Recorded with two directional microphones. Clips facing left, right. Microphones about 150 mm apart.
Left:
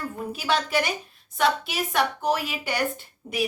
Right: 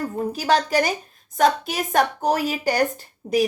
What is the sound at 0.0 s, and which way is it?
A woman's voice, 40° right (ahead or behind).